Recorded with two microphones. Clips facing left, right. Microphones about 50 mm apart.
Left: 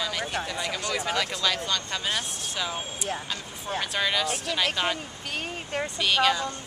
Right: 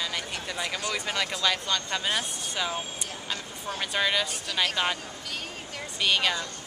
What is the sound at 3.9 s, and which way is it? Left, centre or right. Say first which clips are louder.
Speech: right 1 dB; centre.